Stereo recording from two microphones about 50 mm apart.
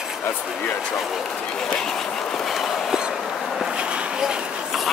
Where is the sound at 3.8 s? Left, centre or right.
Right.